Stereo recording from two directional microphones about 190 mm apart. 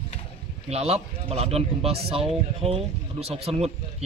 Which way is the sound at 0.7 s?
35° right (ahead or behind).